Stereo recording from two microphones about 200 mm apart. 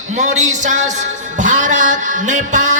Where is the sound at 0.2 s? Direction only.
35° right (ahead or behind).